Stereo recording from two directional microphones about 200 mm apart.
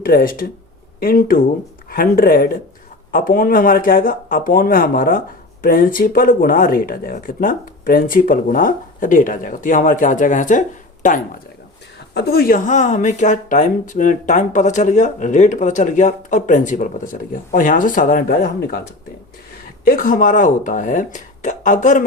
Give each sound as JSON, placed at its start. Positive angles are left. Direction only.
{"t": 0.0, "sound": "speech", "side_deg": 45}
{"t": 11.9, "sound": "speech", "side_deg": 55}
{"t": 19.8, "sound": "speech", "side_deg": 45}